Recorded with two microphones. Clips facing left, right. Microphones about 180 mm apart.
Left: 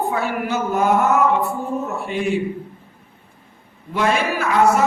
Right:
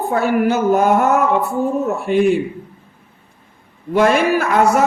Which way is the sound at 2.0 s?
55° right (ahead or behind).